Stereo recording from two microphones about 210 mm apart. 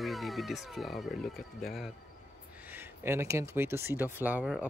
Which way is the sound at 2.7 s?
10° right (ahead or behind).